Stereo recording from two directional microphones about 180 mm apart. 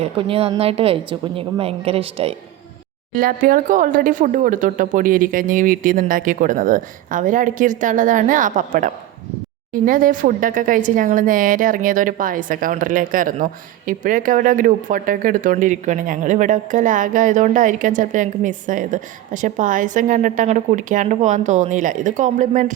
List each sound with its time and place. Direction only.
0.0 s a woman's voice: 30° right (ahead or behind)
3.2 s a woman's voice: 50° right (ahead or behind)